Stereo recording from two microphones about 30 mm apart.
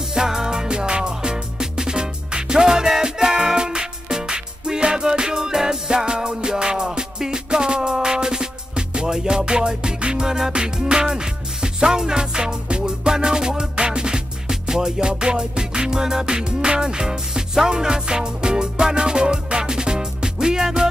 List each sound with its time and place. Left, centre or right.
0.1 s music: right
10.2 s music: right